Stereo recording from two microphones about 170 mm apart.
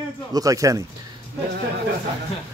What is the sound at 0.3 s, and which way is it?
Speech, 20° right (ahead or behind).